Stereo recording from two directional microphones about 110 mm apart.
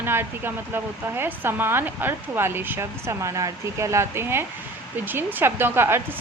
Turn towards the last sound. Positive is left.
turn(degrees=-20)  # may be behind; listen again after turning